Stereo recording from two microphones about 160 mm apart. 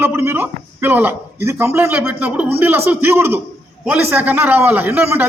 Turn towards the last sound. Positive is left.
turn(degrees=-15)  # may be behind; listen again after turning